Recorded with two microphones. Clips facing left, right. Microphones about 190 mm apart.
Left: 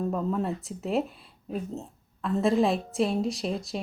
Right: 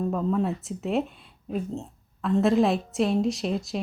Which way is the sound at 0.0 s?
Centre (ahead or behind).